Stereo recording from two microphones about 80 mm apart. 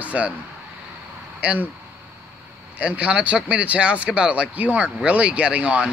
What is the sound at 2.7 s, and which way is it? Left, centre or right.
Speech, centre.